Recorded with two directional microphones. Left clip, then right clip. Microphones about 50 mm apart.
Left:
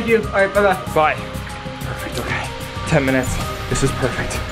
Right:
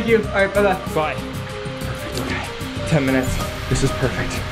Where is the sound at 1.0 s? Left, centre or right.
Left.